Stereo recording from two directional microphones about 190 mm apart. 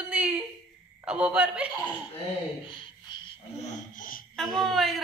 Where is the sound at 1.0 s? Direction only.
5° right (ahead or behind).